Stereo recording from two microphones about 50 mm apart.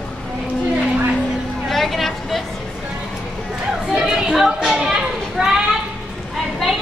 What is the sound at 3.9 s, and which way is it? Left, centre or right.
Music, centre.